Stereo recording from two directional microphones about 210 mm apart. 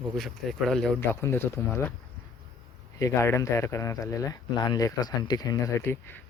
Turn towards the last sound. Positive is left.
turn(degrees=20)  # may be behind; listen again after turning